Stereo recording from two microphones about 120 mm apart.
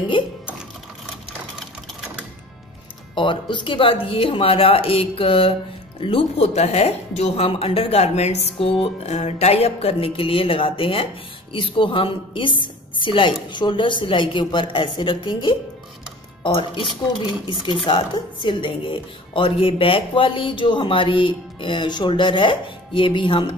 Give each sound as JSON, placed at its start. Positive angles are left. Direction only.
{"t": 0.2, "sound": "typing", "side_deg": 45}
{"t": 3.2, "sound": "a woman's voice", "side_deg": 40}
{"t": 8.5, "sound": "a woman's voice", "side_deg": 50}
{"t": 17.8, "sound": "a woman's voice", "side_deg": 45}